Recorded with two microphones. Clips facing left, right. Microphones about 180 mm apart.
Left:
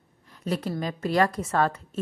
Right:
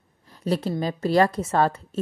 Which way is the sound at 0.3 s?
30° right (ahead or behind).